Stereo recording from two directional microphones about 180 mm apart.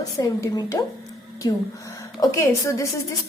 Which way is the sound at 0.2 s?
20° left (ahead or behind).